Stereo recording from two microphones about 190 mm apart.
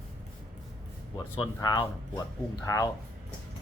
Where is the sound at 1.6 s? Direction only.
20° left (ahead or behind).